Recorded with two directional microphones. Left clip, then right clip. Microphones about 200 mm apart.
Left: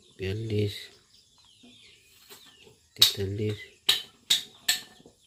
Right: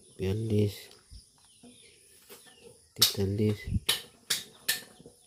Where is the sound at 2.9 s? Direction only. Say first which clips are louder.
Left 4 dB; 20° right (ahead or behind).